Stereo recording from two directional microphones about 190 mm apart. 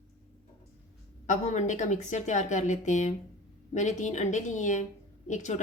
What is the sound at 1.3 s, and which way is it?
A woman's voice, 40° left (ahead or behind).